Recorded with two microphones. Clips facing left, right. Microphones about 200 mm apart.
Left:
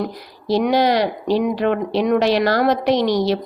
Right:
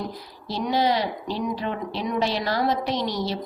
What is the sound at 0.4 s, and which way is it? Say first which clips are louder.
A woman's voice: left 7 dB; 80° left.